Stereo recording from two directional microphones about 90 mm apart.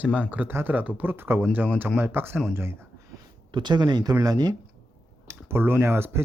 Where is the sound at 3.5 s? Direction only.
55° right (ahead or behind).